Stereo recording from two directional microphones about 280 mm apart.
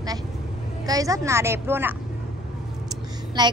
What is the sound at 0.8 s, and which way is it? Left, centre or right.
A woman's voice, centre.